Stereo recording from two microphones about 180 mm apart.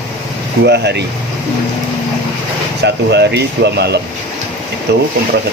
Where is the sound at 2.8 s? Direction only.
70° right (ahead or behind).